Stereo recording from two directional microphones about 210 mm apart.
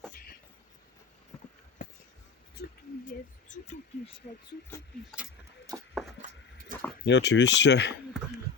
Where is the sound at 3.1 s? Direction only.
35° left (ahead or behind).